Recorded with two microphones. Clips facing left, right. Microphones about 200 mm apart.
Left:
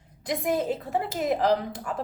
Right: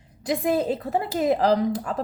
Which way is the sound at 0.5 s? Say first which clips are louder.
Right 3 dB; 35° right (ahead or behind).